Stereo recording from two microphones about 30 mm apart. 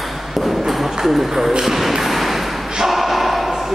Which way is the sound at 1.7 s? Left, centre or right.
Centre.